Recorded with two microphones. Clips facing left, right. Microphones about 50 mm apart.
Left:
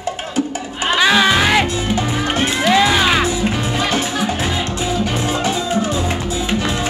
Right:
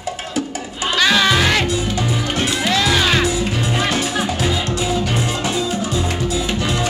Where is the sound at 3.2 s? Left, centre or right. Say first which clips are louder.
Left 1 dB; left.